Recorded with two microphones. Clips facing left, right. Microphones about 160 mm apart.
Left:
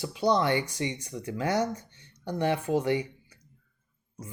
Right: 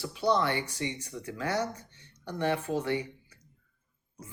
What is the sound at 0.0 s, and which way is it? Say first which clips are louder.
Speech: left 2 dB; 15° left (ahead or behind).